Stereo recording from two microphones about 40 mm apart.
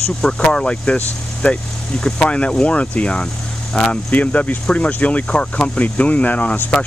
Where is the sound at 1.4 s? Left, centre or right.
Left.